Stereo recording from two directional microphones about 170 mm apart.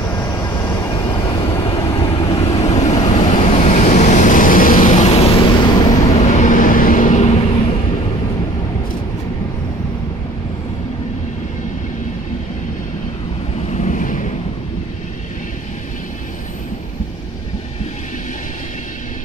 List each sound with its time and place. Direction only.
0.4 s vehicle: 20° left (ahead or behind)
2.6 s vehicle: 40° left (ahead or behind)
13.7 s vehicle: 45° left (ahead or behind)